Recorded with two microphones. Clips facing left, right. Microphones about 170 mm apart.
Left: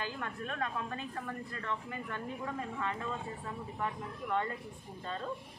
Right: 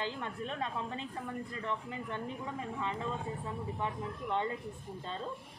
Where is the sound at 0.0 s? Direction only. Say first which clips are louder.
Right 1 dB; 20° right (ahead or behind).